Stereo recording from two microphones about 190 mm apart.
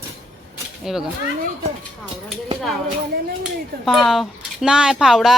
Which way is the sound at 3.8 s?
Centre (ahead or behind).